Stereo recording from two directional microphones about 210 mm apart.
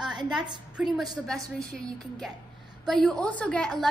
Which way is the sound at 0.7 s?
Centre (ahead or behind).